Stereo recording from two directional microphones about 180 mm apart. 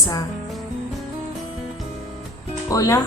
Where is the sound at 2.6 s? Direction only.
20° left (ahead or behind).